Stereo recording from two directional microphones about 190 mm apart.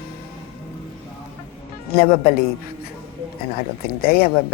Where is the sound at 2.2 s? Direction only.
55° left (ahead or behind).